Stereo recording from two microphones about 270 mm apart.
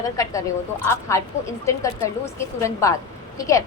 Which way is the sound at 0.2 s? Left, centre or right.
Centre.